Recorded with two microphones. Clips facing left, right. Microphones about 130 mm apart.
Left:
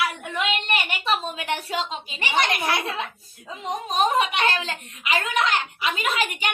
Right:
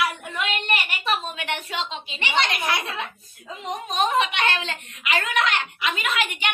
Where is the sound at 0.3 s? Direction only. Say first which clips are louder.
Left 3 dB; 25° left (ahead or behind); by 2.9 s 50° left (ahead or behind).